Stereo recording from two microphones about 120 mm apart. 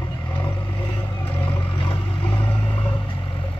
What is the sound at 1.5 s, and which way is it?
Boat, 45° left (ahead or behind).